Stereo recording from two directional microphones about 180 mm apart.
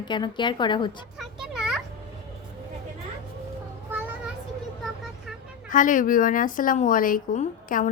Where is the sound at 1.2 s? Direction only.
Centre (ahead or behind).